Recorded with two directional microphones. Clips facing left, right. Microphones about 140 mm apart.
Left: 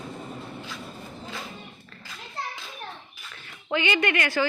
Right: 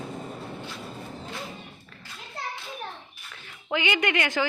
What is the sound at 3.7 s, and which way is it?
Speech, 15° right (ahead or behind).